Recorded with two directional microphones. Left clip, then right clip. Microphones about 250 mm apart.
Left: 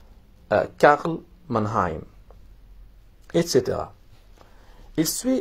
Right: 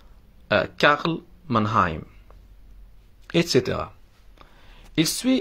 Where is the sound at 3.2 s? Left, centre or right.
Right.